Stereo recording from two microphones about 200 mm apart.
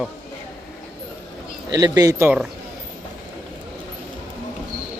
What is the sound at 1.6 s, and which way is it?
Speech, 20° right (ahead or behind).